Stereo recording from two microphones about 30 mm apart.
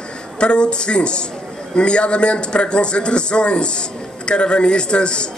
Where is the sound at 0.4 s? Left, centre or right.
Left.